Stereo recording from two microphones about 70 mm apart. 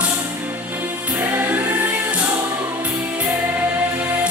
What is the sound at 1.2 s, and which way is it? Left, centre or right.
Music, right.